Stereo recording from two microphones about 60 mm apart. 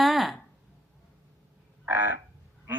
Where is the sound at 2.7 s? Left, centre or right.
Right.